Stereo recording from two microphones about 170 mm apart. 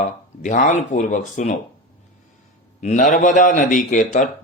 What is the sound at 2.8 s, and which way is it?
Speech, 45° left (ahead or behind).